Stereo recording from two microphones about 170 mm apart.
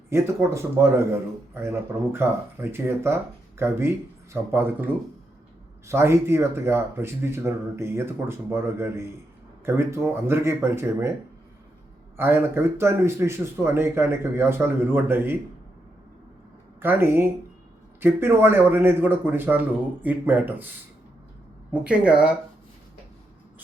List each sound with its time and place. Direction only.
0.1 s speech: 15° right (ahead or behind)
12.1 s speech: 15° right (ahead or behind)
16.8 s speech: 15° right (ahead or behind)